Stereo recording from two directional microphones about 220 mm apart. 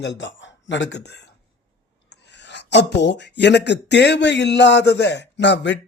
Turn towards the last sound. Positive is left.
turn(degrees=55)  # may be behind; listen again after turning